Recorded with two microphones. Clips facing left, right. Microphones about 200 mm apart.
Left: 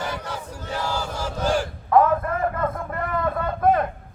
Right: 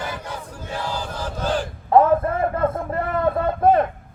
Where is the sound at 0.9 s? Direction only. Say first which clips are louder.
Left 1 dB; 10° left (ahead or behind).